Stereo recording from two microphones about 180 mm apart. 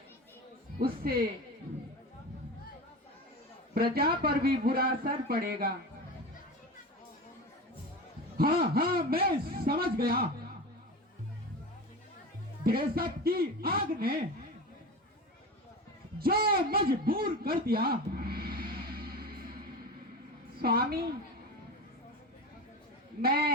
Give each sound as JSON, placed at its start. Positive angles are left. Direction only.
{"t": 0.8, "sound": "a man's voice", "side_deg": -55}
{"t": 3.9, "sound": "a man's voice", "side_deg": -55}
{"t": 8.4, "sound": "a man's voice", "side_deg": -55}
{"t": 12.6, "sound": "a man's voice", "side_deg": -55}
{"t": 16.1, "sound": "a sound", "side_deg": -55}
{"t": 20.6, "sound": "a man's voice", "side_deg": -55}
{"t": 23.2, "sound": "a man's voice", "side_deg": -55}